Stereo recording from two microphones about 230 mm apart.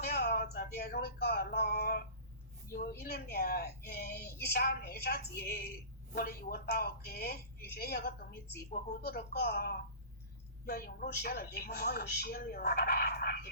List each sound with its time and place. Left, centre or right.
0.0 s a woman's voice: left